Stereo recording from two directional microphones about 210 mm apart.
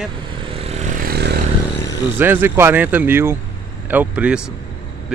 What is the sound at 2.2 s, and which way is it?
Speech, 10° right (ahead or behind).